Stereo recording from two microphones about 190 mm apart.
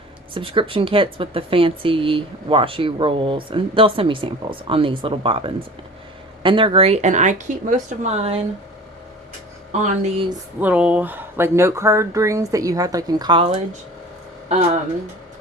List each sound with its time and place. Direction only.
0.3 s speech: 30° right (ahead or behind)
10.0 s speech: 30° right (ahead or behind)
10.6 s speech: 10° right (ahead or behind); by 13.6 s 30° right (ahead or behind)